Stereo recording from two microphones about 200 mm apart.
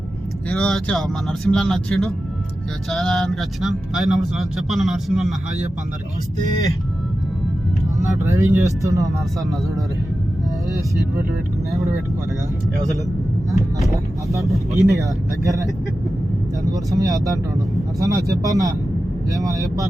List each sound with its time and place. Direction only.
0.5 s speech: 5° left (ahead or behind)
7.9 s speech: 15° right (ahead or behind)
14.7 s speech: 15° right (ahead or behind)